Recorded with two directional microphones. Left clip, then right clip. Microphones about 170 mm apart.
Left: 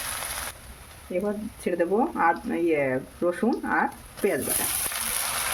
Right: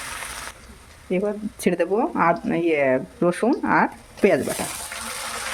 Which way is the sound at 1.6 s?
70° right (ahead or behind).